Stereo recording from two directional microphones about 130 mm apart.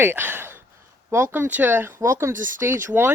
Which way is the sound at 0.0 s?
15° right (ahead or behind).